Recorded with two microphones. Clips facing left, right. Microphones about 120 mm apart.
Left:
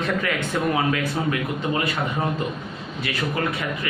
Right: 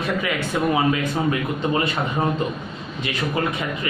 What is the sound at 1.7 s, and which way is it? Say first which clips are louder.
Speech: right 2 dB; 30° right (ahead or behind).